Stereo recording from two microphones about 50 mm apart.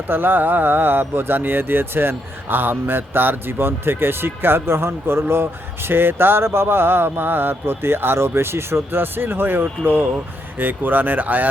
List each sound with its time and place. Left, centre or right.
0.1 s speech: right